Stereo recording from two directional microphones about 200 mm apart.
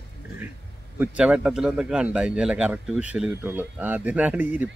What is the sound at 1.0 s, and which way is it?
Speech, 5° right (ahead or behind).